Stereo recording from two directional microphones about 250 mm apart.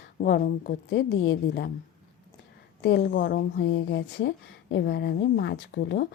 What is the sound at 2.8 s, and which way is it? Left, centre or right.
Speech, left.